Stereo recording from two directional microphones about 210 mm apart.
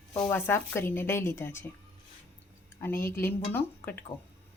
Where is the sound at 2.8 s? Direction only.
10° left (ahead or behind).